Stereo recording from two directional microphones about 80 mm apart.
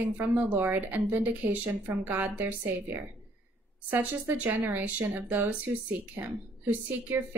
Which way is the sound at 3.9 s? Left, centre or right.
Right.